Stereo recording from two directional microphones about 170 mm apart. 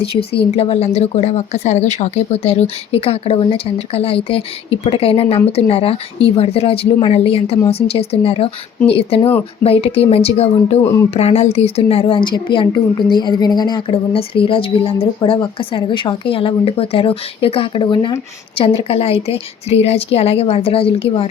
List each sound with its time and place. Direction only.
0.0 s a woman's voice: 35° left (ahead or behind)